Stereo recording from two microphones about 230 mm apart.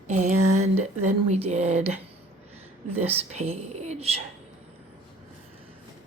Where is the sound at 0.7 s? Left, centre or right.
Right.